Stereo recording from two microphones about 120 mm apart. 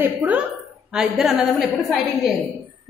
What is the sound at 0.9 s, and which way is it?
A woman's voice, 5° right (ahead or behind).